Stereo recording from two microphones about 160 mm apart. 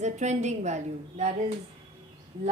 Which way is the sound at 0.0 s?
45° right (ahead or behind).